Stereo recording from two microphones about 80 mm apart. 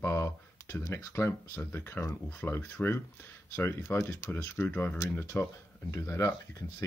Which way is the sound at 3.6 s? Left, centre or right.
Left.